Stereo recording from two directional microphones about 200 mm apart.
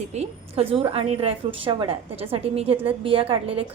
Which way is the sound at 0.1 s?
30° right (ahead or behind).